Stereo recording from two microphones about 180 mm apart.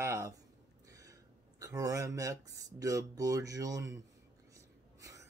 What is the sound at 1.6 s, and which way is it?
Speech, 20° right (ahead or behind).